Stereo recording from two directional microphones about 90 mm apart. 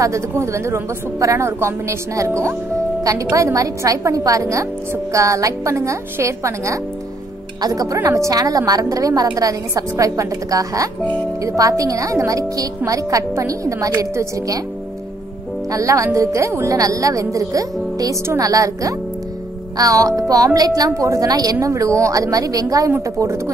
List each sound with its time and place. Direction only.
0.0 s a woman's voice: 35° right (ahead or behind)
15.7 s a woman's voice: 35° right (ahead or behind)